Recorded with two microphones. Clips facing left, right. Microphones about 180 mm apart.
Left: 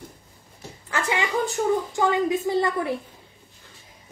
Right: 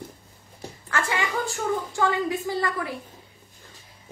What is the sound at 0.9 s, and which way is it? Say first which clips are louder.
A woman's voice: left 2 dB; 20° left (ahead or behind).